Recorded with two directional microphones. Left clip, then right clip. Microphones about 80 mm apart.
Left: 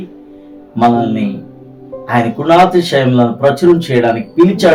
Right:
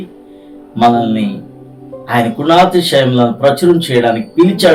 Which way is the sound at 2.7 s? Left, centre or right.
Centre.